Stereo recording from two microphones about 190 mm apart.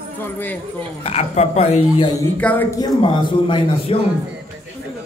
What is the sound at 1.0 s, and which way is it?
Speech, 35° left (ahead or behind).